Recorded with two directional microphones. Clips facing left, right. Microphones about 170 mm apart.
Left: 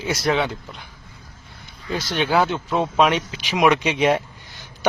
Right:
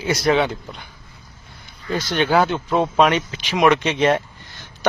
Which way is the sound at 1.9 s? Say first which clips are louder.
Right 3 dB; 5° left (ahead or behind).